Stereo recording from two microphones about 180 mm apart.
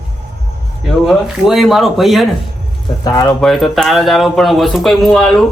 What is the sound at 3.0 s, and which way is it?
Speech, 20° left (ahead or behind).